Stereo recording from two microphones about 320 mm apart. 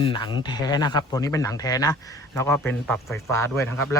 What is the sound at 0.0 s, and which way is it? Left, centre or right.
Speech, centre.